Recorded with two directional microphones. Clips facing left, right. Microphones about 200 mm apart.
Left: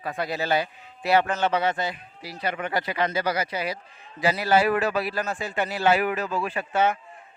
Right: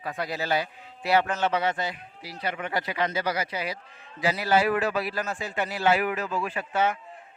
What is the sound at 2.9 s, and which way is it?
Speech, 60° left (ahead or behind).